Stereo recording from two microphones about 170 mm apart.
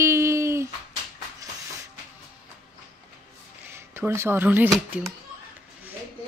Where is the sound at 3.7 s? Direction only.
15° right (ahead or behind).